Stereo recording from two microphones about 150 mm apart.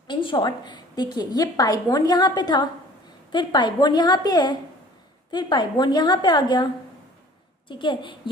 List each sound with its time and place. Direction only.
0.1 s a woman's voice: 30° left (ahead or behind)
7.7 s a woman's voice: 30° left (ahead or behind)